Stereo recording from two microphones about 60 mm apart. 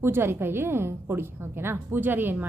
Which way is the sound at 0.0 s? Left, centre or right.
Right.